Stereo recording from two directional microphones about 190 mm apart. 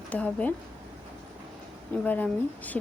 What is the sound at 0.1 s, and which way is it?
Speech, 5° left (ahead or behind).